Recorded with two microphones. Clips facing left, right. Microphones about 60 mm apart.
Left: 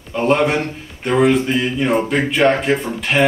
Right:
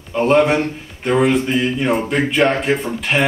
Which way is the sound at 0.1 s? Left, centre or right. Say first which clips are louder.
Right 2 dB; centre.